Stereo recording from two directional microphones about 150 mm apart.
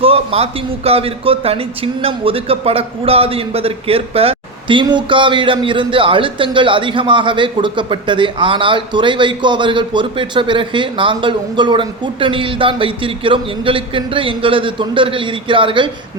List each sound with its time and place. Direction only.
0.0 s a man's voice: 40° right (ahead or behind)